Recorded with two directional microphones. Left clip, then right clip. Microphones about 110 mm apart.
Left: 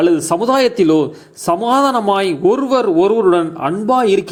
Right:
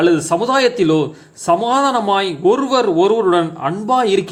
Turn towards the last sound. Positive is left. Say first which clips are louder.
# left 1 dB
turn(degrees=25)  # may be behind; listen again after turning